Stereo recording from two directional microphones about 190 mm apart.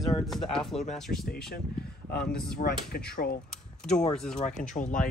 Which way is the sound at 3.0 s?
55° left (ahead or behind).